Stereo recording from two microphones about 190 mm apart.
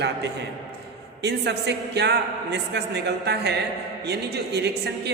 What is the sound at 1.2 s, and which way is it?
A man's voice, 60° right (ahead or behind).